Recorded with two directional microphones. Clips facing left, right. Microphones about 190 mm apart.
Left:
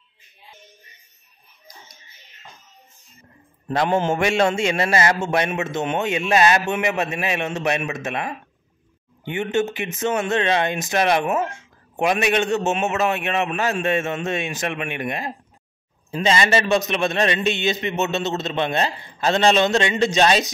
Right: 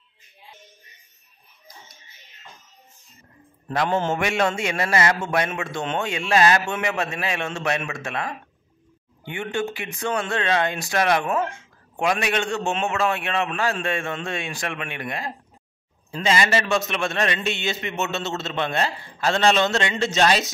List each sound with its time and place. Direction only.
3.7 s mantra: 15° left (ahead or behind)
4.1 s a man's voice: 30° left (ahead or behind)